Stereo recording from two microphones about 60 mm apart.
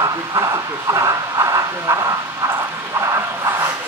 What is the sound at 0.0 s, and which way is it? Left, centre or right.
Speech, right.